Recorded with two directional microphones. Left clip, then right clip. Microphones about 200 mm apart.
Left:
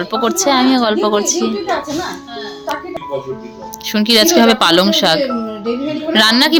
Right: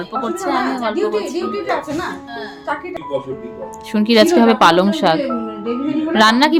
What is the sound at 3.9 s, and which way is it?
A woman's voice, 5° right (ahead or behind).